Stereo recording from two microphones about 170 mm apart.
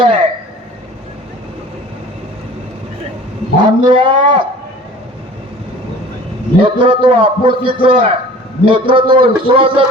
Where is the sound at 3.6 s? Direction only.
30° right (ahead or behind).